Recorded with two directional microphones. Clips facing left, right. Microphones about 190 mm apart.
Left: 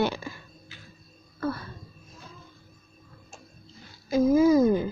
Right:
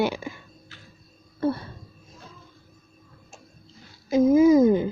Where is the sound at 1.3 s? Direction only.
30° right (ahead or behind).